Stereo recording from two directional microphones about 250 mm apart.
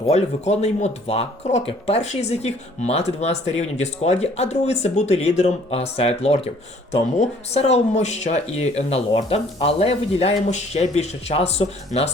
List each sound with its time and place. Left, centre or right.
0.1 s speech: left